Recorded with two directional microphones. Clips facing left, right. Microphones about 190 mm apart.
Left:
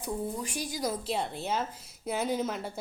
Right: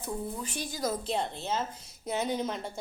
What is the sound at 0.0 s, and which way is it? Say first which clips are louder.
A woman's voice: left 2 dB; 10° left (ahead or behind).